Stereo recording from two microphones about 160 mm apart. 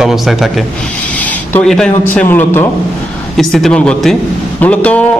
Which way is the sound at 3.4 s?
Centre (ahead or behind).